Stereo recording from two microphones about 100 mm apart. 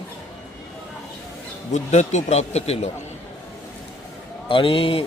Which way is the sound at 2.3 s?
90° left.